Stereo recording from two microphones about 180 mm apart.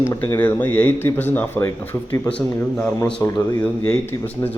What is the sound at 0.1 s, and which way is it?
Speech, 15° left (ahead or behind).